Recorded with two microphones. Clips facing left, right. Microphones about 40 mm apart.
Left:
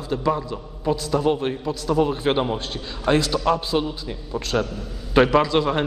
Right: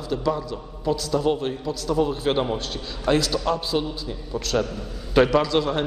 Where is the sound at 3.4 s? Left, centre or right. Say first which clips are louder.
Left 3 dB; left.